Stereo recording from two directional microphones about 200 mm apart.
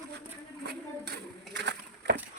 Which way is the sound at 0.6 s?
55° right (ahead or behind).